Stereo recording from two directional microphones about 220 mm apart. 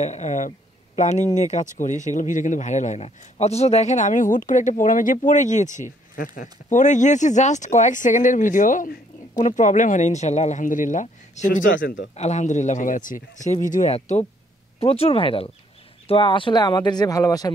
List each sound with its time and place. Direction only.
0.0 s speech: 30° left (ahead or behind); by 17.5 s 15° left (ahead or behind)